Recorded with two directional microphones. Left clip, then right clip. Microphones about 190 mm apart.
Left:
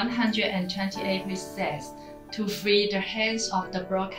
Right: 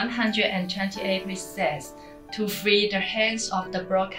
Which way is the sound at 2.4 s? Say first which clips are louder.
Right 1 dB; 20° right (ahead or behind).